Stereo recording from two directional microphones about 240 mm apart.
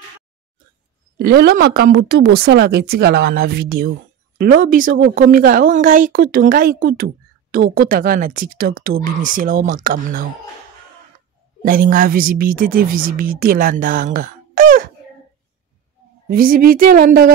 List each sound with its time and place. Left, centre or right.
1.1 s speech: right
11.6 s speech: right
16.3 s speech: right